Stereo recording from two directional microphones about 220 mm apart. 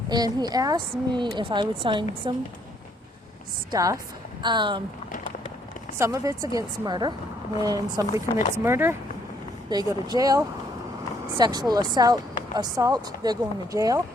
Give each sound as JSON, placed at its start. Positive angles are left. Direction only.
{"t": 0.1, "sound": "a woman's voice", "side_deg": -20}
{"t": 3.7, "sound": "a woman's voice", "side_deg": -15}
{"t": 6.0, "sound": "speech", "side_deg": -15}